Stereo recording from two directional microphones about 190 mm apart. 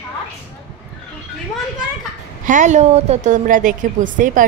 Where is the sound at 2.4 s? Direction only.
40° right (ahead or behind).